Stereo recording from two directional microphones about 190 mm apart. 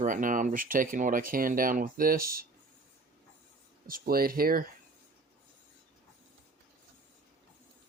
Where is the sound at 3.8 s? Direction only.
50° right (ahead or behind).